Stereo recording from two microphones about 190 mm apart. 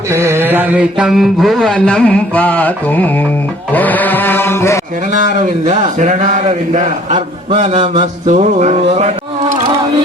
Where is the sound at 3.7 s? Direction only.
10° left (ahead or behind).